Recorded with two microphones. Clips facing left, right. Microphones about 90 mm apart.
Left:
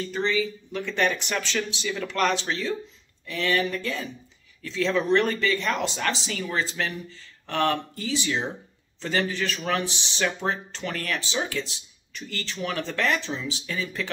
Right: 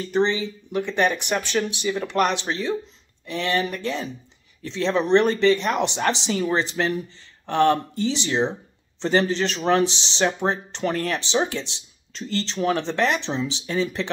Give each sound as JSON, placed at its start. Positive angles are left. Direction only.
{"t": 0.1, "sound": "speech", "side_deg": -25}